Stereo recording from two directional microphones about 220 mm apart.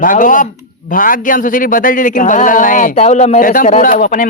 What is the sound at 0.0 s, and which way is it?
A man's voice, 35° left (ahead or behind).